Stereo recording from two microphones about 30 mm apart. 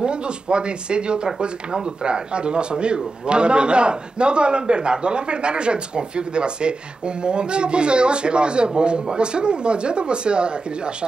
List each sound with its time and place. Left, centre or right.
0.0 s speech: right